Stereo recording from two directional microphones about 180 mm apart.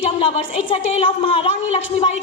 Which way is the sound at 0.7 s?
35° left (ahead or behind).